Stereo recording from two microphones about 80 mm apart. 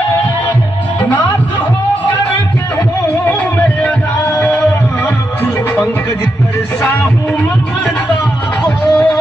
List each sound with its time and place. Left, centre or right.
3.3 s music: left
4.4 s a sound: centre
8.6 s music: centre